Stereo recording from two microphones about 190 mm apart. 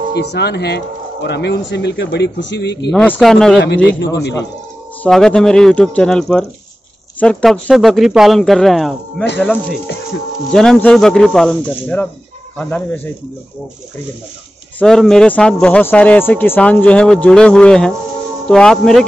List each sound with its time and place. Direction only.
0.1 s speech: 60° left (ahead or behind)
2.9 s speech: 5° left (ahead or behind)
3.6 s speech: 65° left (ahead or behind)
5.0 s speech: 5° left (ahead or behind)
10.5 s speech: 5° left (ahead or behind)
12.5 s speech: 10° left (ahead or behind)
14.8 s speech: 5° left (ahead or behind)